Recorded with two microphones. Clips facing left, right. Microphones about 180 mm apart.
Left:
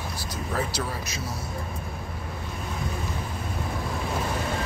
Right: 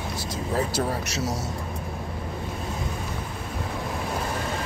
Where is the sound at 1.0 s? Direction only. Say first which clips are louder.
Right 6 dB; 75° right (ahead or behind).